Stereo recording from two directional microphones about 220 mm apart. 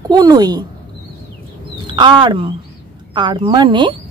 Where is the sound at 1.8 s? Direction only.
20° right (ahead or behind).